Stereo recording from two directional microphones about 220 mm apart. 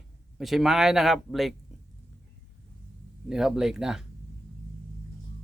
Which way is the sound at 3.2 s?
Centre (ahead or behind).